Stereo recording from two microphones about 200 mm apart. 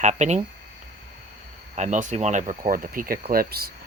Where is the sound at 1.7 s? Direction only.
35° right (ahead or behind).